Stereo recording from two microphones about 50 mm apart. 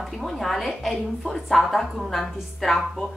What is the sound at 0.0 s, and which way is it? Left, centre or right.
A woman's voice, centre.